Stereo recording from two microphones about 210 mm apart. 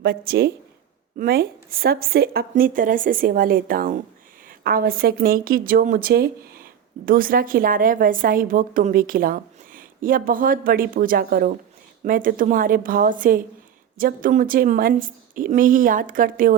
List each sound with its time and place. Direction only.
0.0 s a woman's voice: 45° right (ahead or behind)